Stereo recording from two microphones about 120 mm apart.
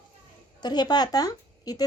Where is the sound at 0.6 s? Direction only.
35° left (ahead or behind).